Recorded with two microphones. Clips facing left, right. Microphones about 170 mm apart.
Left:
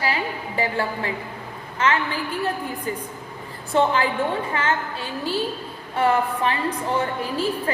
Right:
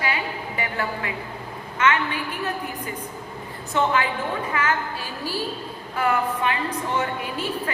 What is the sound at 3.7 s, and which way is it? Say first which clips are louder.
A woman's voice: left 3 dB; 30° left (ahead or behind).